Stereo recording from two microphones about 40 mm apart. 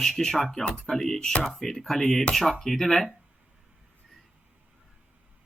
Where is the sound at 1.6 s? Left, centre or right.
Centre.